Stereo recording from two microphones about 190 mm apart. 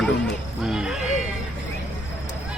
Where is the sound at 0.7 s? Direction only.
5° right (ahead or behind).